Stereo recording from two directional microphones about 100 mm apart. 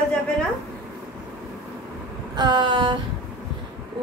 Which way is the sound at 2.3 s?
50° right (ahead or behind).